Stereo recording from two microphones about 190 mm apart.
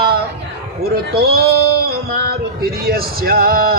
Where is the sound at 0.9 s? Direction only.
55° right (ahead or behind).